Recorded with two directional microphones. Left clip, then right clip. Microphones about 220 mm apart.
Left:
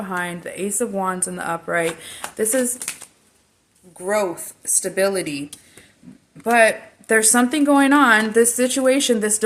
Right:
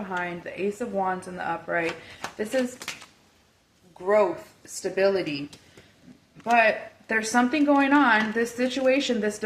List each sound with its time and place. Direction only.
0.0 s speech: 55° left (ahead or behind)
4.0 s a woman's voice: 50° left (ahead or behind)